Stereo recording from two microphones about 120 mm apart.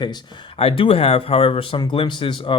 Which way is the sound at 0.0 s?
40° left (ahead or behind).